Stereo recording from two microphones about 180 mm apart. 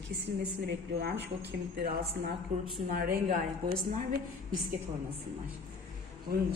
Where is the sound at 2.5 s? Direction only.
45° right (ahead or behind).